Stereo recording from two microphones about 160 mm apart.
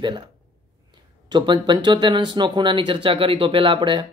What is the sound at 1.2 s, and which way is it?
Speech, 30° right (ahead or behind).